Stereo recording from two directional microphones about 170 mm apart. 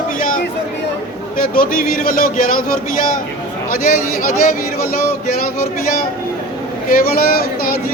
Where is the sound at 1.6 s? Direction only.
55° left (ahead or behind).